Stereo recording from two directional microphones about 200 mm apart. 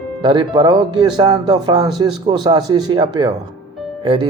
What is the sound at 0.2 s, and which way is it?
Speech, 25° right (ahead or behind).